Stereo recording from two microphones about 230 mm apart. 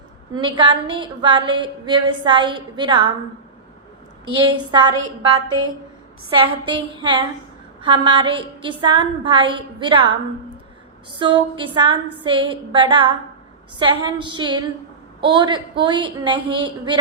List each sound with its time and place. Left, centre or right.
0.3 s a woman's voice: right
4.3 s a woman's voice: right
6.3 s a woman's voice: right
11.2 s a woman's voice: right